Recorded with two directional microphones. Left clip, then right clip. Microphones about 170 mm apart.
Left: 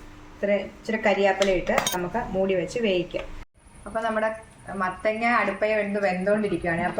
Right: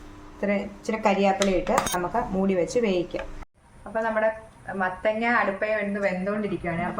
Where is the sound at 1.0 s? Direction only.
75° right (ahead or behind).